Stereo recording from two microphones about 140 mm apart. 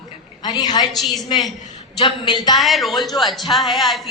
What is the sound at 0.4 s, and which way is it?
A woman's voice, 30° left (ahead or behind).